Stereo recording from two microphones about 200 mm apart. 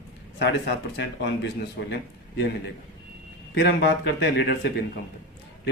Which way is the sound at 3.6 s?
55° left (ahead or behind).